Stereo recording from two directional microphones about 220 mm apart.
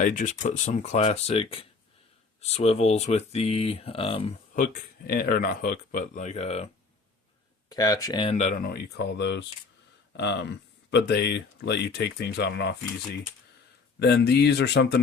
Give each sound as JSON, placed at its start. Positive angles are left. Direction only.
{"t": 0.0, "sound": "speech", "side_deg": 35}
{"t": 4.5, "sound": "speech", "side_deg": 35}
{"t": 7.7, "sound": "speech", "side_deg": 15}
{"t": 14.0, "sound": "speech", "side_deg": 50}